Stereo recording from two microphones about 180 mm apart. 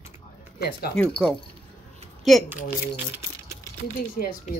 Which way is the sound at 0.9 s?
5° left (ahead or behind).